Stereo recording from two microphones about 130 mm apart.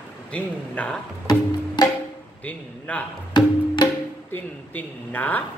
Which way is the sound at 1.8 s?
35° left (ahead or behind).